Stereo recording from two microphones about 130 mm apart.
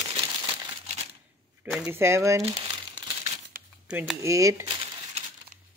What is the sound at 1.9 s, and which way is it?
Speech, 20° right (ahead or behind).